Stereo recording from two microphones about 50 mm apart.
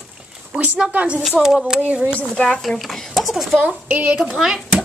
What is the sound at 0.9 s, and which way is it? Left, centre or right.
Speech, right.